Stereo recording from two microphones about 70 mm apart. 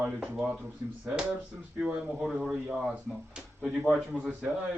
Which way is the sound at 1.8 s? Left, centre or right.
Centre.